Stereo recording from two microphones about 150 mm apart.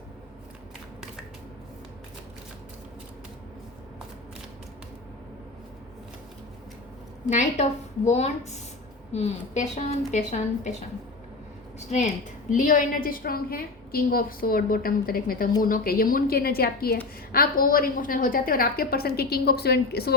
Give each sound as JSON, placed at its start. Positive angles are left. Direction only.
{"t": 7.3, "sound": "a woman's voice", "side_deg": 50}
{"t": 11.9, "sound": "a woman's voice", "side_deg": 50}
{"t": 17.3, "sound": "a woman's voice", "side_deg": 75}